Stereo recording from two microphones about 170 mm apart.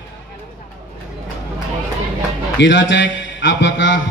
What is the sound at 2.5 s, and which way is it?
A man's voice, 90° left.